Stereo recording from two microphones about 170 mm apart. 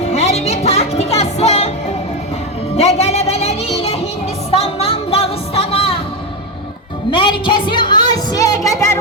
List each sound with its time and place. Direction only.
0.0 s music: 40° left (ahead or behind)
2.7 s music: 40° left (ahead or behind)
7.1 s a sound: 30° left (ahead or behind)